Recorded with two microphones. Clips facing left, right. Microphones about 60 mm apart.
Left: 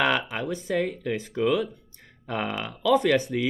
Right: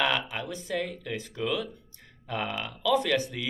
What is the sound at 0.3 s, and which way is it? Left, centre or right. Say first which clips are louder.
Speech: left 5 dB; left.